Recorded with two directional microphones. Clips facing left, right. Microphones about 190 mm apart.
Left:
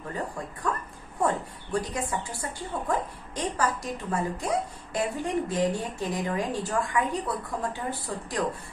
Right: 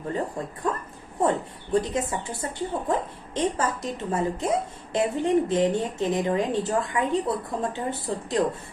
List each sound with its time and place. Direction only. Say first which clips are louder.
0.4 s a woman's voice: right 4 dB; 25° right (ahead or behind)
1.7 s a woman's voice: right 5 dB; 20° right (ahead or behind)